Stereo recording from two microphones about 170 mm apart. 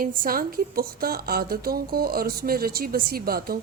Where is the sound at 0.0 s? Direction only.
55° right (ahead or behind).